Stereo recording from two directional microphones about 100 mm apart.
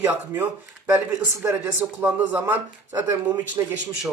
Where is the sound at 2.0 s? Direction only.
15° right (ahead or behind).